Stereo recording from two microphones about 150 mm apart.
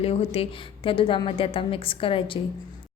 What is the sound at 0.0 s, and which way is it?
A woman's voice, 40° left (ahead or behind).